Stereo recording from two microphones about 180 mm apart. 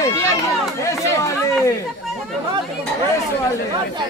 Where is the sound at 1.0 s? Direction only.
15° left (ahead or behind).